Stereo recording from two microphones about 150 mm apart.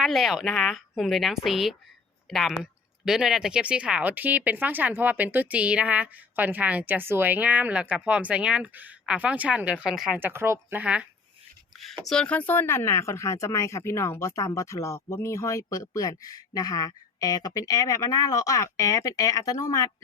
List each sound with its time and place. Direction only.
0.0 s a woman's voice: centre (ahead or behind)
10.2 s speech: 15° right (ahead or behind)
12.0 s speech: 5° left (ahead or behind); by 19.9 s 25° left (ahead or behind)